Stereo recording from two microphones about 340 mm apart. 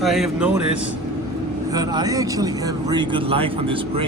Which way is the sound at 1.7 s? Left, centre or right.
Centre.